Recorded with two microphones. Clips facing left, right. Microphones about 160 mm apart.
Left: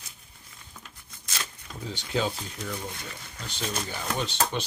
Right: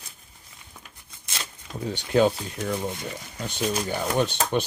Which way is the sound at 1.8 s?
55° right (ahead or behind).